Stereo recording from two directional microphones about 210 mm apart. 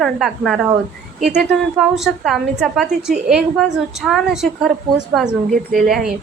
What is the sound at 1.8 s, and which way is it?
A woman's voice, centre (ahead or behind).